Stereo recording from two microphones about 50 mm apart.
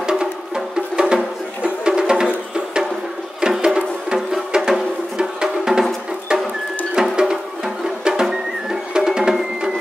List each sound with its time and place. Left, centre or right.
0.0 s music: centre
7.0 s music: centre